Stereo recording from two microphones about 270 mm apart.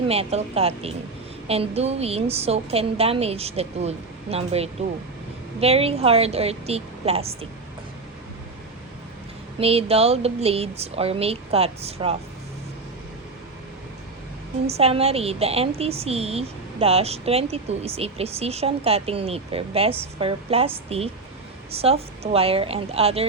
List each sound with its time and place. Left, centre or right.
0.1 s a woman's voice: right
9.6 s a woman's voice: right
14.7 s a woman's voice: right